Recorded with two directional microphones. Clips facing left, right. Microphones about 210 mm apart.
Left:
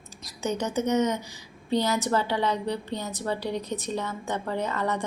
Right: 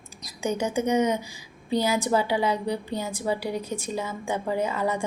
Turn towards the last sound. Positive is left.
turn(degrees=-10)  # may be behind; listen again after turning